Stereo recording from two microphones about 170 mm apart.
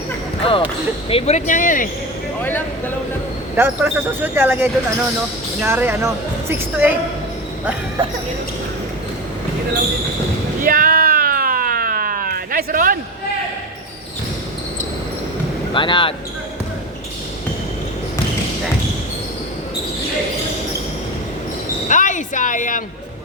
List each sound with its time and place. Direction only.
0.4 s speech: 30° left (ahead or behind)
1.1 s speech: 45° left (ahead or behind)
2.4 s speech: 10° left (ahead or behind)
3.5 s speech: 10° right (ahead or behind)
10.6 s a sound: 55° right (ahead or behind)
15.7 s speech: 30° left (ahead or behind)
21.8 s speech: 45° left (ahead or behind)